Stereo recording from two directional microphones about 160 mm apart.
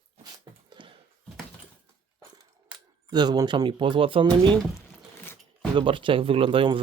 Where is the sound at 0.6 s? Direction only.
30° right (ahead or behind).